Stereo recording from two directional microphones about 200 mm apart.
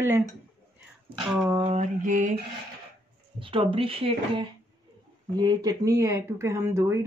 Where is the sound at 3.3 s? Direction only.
25° right (ahead or behind).